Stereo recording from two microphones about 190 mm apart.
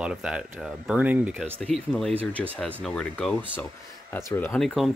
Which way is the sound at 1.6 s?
5° left (ahead or behind).